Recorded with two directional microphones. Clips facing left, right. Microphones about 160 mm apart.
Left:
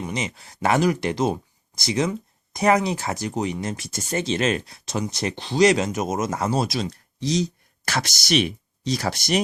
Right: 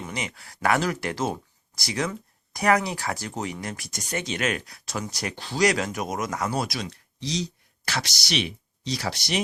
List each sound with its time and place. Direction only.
0.0 s speech: 20° left (ahead or behind)
6.9 s a sound: 50° left (ahead or behind)
7.9 s speech: 50° left (ahead or behind)